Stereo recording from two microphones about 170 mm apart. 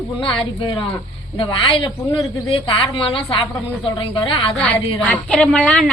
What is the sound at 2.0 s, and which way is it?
Speech, 15° left (ahead or behind).